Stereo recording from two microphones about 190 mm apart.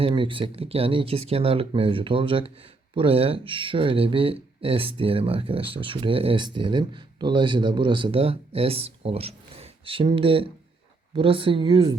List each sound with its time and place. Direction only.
0.0 s speech: 25° right (ahead or behind)